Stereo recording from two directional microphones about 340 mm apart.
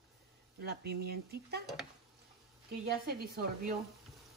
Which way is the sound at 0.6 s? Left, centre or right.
Right.